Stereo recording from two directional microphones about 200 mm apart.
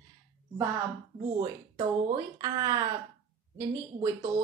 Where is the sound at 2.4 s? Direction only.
20° right (ahead or behind).